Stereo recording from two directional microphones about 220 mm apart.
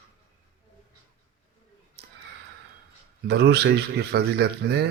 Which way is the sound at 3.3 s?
50° right (ahead or behind).